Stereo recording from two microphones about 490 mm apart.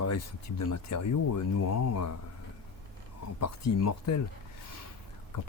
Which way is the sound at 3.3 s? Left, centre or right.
Left.